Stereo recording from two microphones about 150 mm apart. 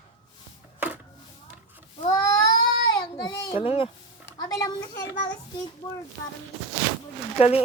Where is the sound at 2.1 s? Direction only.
25° left (ahead or behind).